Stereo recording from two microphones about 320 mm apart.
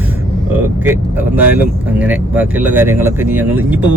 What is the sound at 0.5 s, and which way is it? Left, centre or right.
Speech, centre.